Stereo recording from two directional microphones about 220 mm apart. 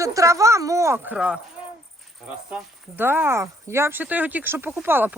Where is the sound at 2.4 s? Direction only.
10° right (ahead or behind).